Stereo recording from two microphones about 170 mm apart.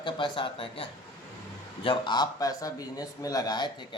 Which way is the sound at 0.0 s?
30° left (ahead or behind).